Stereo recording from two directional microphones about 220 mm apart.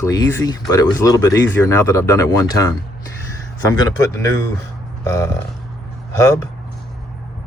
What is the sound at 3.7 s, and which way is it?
Speech, 15° left (ahead or behind).